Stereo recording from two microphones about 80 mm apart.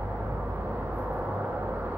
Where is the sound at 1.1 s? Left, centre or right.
Right.